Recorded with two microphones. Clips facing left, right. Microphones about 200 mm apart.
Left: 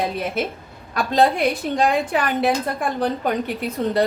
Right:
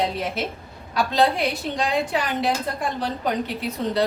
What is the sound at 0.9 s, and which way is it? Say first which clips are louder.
A woman's voice: left 2 dB; 50° left (ahead or behind).